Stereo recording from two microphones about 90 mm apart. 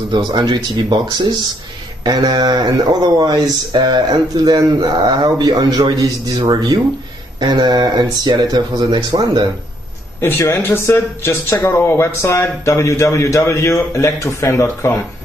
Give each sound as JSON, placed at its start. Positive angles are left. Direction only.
{"t": 0.3, "sound": "speech", "side_deg": -50}
{"t": 10.2, "sound": "speech", "side_deg": 30}